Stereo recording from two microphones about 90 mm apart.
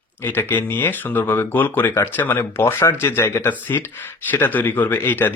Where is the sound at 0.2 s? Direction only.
25° left (ahead or behind).